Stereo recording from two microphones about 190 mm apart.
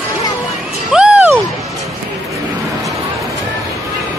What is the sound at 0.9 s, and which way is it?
Music, 5° right (ahead or behind).